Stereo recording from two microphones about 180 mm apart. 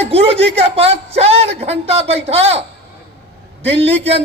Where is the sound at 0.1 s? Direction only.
35° right (ahead or behind).